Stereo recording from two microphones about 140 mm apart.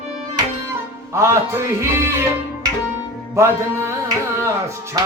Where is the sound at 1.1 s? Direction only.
20° right (ahead or behind).